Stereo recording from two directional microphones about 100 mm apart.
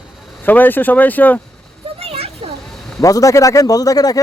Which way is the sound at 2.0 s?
85° right.